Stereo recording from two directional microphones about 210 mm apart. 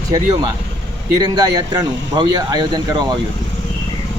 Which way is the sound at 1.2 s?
20° right (ahead or behind).